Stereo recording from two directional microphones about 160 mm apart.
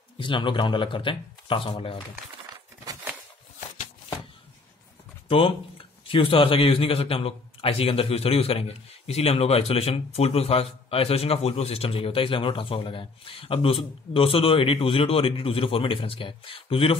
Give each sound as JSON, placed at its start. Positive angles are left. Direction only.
{"t": 0.2, "sound": "speech", "side_deg": 30}
{"t": 5.3, "sound": "speech", "side_deg": 35}